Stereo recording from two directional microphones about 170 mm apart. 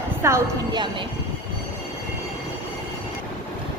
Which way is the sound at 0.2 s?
15° right (ahead or behind).